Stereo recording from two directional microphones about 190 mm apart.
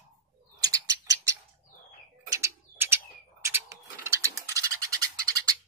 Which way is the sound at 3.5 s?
10° right (ahead or behind).